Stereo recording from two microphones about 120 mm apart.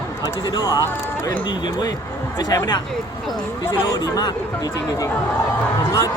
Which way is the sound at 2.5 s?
35° left (ahead or behind).